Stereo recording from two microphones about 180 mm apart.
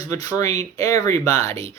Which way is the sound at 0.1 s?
20° left (ahead or behind).